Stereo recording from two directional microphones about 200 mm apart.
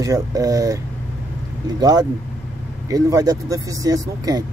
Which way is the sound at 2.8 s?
20° right (ahead or behind).